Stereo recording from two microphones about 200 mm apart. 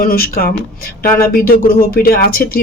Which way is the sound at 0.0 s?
45° left (ahead or behind).